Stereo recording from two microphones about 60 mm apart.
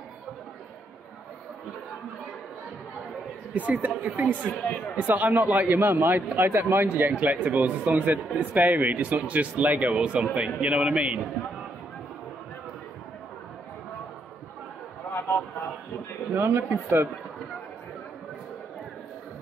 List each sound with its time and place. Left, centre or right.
3.5 s speech: right
4.5 s speech: left
4.9 s speech: right
16.3 s speech: right